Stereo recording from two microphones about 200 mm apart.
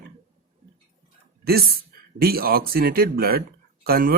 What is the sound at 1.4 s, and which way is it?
A woman's voice, 50° right (ahead or behind).